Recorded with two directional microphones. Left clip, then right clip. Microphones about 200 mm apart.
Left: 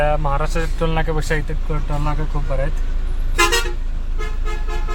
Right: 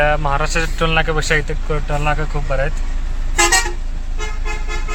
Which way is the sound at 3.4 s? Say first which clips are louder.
Right 2 dB; 45° right (ahead or behind).